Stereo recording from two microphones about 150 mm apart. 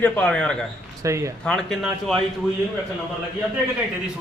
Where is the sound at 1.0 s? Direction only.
20° right (ahead or behind).